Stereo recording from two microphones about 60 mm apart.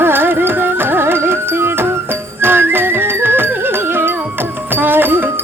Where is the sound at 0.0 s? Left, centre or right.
Right.